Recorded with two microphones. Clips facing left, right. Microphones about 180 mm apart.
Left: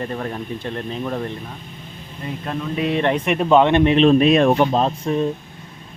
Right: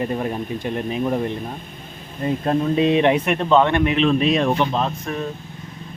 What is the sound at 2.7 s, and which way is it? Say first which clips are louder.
Speech: right 1 dB; 20° right (ahead or behind).